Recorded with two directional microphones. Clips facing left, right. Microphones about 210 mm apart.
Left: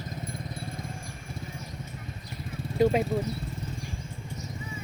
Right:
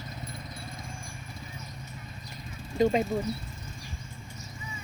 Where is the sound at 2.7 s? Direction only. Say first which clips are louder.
Left 1 dB; 5° left (ahead or behind).